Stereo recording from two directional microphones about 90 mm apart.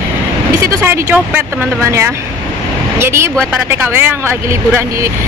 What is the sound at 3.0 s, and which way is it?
Speech, 30° right (ahead or behind).